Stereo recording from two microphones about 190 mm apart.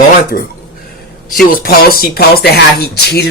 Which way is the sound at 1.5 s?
50° left (ahead or behind).